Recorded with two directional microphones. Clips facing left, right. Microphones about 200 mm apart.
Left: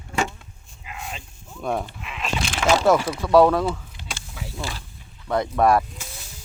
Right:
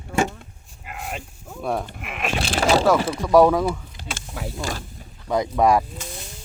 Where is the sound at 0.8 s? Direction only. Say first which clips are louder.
Right 3 dB; 55° right (ahead or behind).